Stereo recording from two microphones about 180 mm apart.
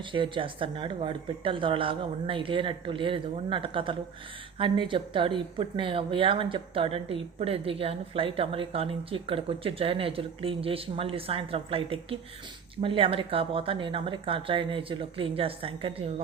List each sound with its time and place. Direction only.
0.0 s speech: 30° right (ahead or behind)